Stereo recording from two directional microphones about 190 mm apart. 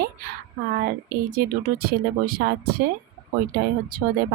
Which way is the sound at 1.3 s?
50° right (ahead or behind).